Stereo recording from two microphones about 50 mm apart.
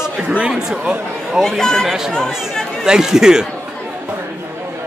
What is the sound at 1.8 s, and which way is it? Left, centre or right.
A man's voice, centre.